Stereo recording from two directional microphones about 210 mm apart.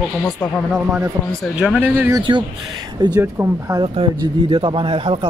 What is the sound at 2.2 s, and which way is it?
Speech, 20° right (ahead or behind).